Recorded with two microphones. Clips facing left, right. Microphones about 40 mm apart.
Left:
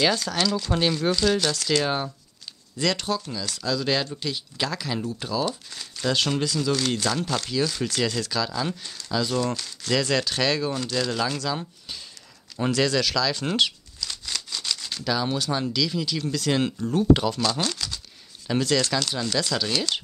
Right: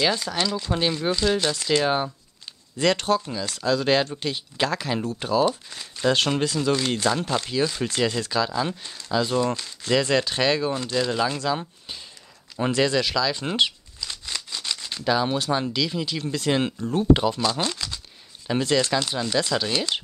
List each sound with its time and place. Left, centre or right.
0.1 s speech: centre
0.7 s speech: centre
2.8 s speech: right
6.8 s speech: centre
12.7 s a sound: right
15.7 s speech: right
17.2 s speech: centre